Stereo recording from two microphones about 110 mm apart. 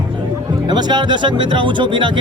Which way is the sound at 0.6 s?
40° right (ahead or behind).